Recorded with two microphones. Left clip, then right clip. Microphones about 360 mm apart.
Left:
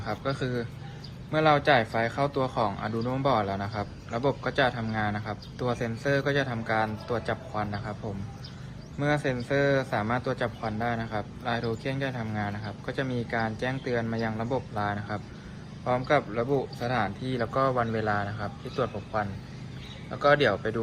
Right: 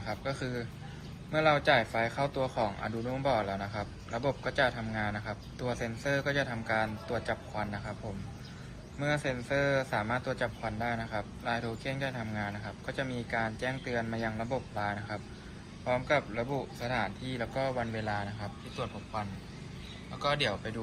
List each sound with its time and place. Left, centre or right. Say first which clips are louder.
0.0 s a man's voice: left 5 dB; left
9.0 s a man's voice: left 5 dB; left
20.1 s a man's voice: left 9 dB; left